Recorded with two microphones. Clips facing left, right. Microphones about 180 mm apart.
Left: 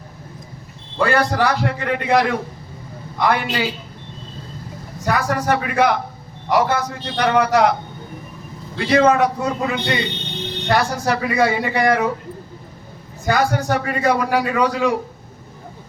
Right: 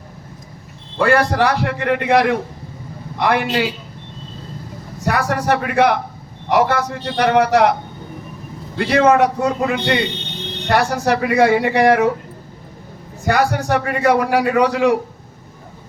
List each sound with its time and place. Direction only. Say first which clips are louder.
1.0 s a man's voice: right 2 dB; 55° right (ahead or behind)
3.4 s a man's voice: right 3 dB; 50° right (ahead or behind)
5.0 s speech: right 1 dB; 60° right (ahead or behind)
8.8 s speech: right 1 dB; 55° right (ahead or behind)
13.2 s speech: right 1 dB; 65° right (ahead or behind)